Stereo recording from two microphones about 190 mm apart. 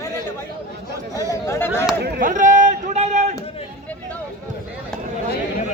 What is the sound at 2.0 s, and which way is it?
Chop, 55° right (ahead or behind).